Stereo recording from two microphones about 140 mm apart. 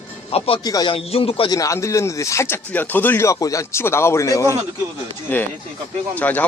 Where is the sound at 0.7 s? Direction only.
25° left (ahead or behind).